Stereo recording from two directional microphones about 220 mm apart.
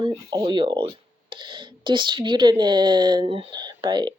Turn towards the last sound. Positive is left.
turn(degrees=-20)  # may be behind; listen again after turning